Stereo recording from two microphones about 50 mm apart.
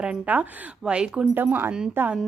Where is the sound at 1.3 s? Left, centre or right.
Right.